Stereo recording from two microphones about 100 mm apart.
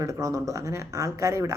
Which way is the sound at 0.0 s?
30° right (ahead or behind).